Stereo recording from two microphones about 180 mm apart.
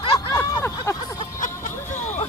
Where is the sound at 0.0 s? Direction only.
25° left (ahead or behind).